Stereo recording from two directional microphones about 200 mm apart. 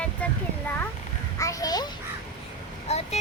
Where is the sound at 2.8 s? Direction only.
30° left (ahead or behind).